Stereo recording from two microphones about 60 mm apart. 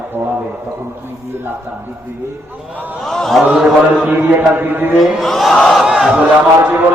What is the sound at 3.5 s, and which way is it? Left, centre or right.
Mantra, centre.